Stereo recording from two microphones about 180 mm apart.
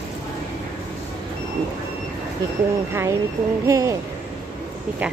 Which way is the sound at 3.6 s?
20° right (ahead or behind).